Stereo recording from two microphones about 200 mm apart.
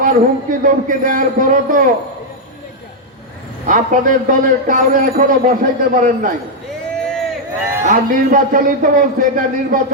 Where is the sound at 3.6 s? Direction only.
40° right (ahead or behind).